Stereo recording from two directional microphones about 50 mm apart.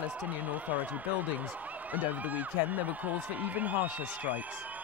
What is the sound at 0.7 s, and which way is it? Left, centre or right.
Speech, right.